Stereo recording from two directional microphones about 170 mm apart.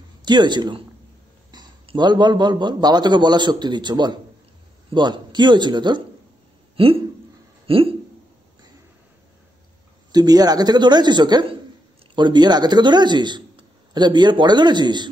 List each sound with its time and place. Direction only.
0.2 s a man's voice: 25° right (ahead or behind)
10.1 s a man's voice: 25° right (ahead or behind)